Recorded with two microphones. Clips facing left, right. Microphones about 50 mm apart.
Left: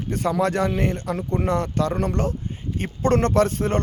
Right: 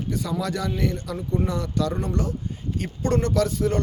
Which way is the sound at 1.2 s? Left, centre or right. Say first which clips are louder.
Left 3 dB; left.